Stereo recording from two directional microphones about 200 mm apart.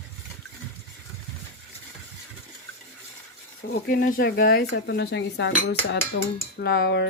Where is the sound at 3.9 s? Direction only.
45° left (ahead or behind).